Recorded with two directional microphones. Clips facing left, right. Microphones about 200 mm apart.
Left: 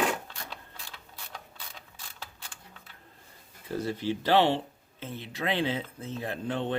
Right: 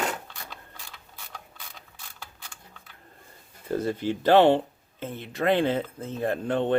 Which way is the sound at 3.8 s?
50° right (ahead or behind).